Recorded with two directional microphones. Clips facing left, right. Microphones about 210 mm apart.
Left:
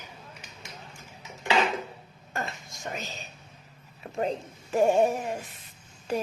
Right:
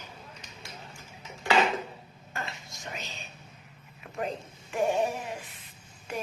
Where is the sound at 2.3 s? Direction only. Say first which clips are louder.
Left 4 dB; 45° left (ahead or behind).